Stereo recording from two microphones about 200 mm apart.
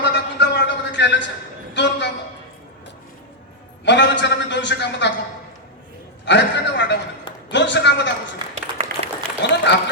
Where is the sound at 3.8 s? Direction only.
65° left (ahead or behind).